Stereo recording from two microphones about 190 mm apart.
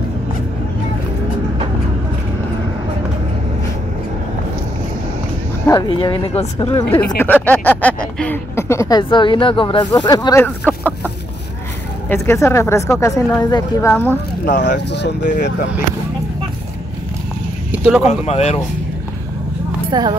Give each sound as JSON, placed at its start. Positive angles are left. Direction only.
{"t": 5.7, "sound": "speech", "side_deg": 25}
{"t": 6.6, "sound": "speech", "side_deg": 10}
{"t": 10.7, "sound": "chicken", "side_deg": -10}
{"t": 12.1, "sound": "speech", "side_deg": 10}
{"t": 14.9, "sound": "speech", "side_deg": 65}
{"t": 17.6, "sound": "a sound", "side_deg": -5}
{"t": 18.2, "sound": "speech", "side_deg": 35}
{"t": 19.9, "sound": "speech", "side_deg": -20}